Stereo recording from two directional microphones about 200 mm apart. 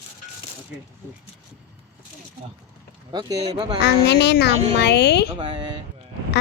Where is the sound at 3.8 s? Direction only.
55° left (ahead or behind).